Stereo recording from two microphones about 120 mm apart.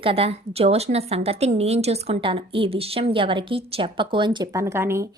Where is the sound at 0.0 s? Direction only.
55° right (ahead or behind).